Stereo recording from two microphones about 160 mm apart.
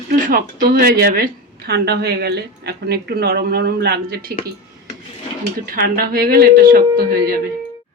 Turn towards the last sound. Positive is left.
turn(degrees=-65)  # may be behind; listen again after turning